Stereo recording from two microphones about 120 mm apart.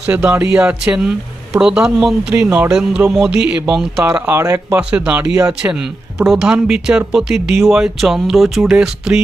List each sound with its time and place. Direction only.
0.1 s speech: 15° right (ahead or behind)
4.3 s speech: 25° right (ahead or behind)
4.8 s speech: 10° right (ahead or behind)